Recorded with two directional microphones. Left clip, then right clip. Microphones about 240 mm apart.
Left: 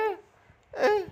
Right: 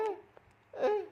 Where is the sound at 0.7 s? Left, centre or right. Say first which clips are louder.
Left 7 dB; left.